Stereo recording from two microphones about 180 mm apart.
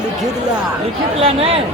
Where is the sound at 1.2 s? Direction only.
30° right (ahead or behind).